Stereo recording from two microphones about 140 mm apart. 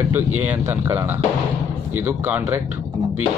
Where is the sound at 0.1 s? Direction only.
15° right (ahead or behind).